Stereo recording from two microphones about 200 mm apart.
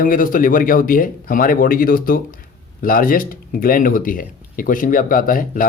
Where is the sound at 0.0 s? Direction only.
45° left (ahead or behind).